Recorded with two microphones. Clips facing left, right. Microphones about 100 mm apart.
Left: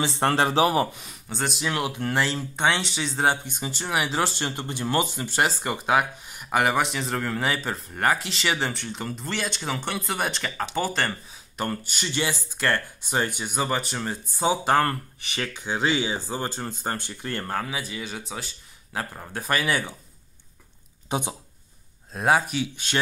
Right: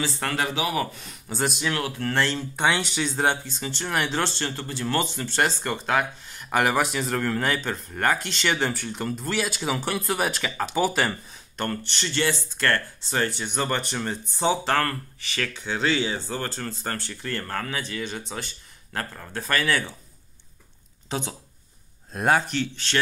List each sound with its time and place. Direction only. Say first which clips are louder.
0.0 s speech: left 5 dB; 25° left (ahead or behind)
0.3 s speech: left 7 dB; 35° left (ahead or behind)
1.3 s speech: right 2 dB; centre (ahead or behind)
1.7 s speech: even; 15° left (ahead or behind); by 3.3 s centre (ahead or behind)
3.4 s speech: even; 15° left (ahead or behind); by 11.1 s 5° right (ahead or behind)
11.5 s speech: even; 5° left (ahead or behind)
18.9 s speech: even; 15° left (ahead or behind)
21.1 s speech: left 2 dB; 15° left (ahead or behind)
22.1 s speech: even; 5° left (ahead or behind)